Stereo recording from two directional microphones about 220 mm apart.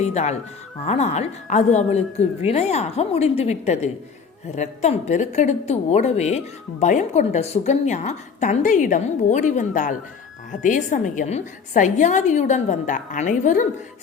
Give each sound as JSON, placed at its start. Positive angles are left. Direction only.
{"t": 0.0, "sound": "a woman's voice", "side_deg": 30}